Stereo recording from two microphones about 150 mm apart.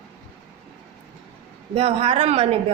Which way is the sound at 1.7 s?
40° right (ahead or behind).